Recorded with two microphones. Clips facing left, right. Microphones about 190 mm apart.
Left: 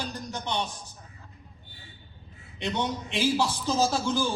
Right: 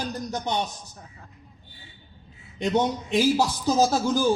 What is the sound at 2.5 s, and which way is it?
A man's voice, 40° right (ahead or behind).